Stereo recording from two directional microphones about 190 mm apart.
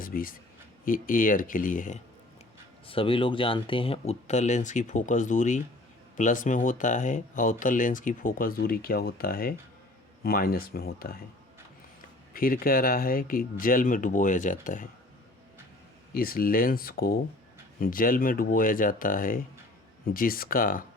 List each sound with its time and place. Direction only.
0.0 s speech: 50° left (ahead or behind)
2.8 s speech: 30° left (ahead or behind); by 11.2 s 55° left (ahead or behind)
12.3 s speech: 50° left (ahead or behind)
16.1 s speech: 50° left (ahead or behind)